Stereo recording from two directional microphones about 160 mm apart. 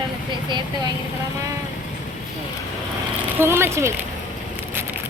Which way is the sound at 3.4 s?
15° right (ahead or behind).